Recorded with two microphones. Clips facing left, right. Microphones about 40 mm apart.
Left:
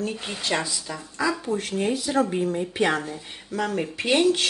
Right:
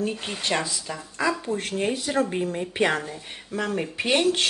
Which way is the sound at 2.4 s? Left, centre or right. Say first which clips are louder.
Left 2 dB; right.